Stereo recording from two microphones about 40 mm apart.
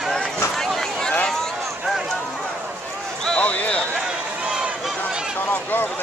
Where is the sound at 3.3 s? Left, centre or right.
Left.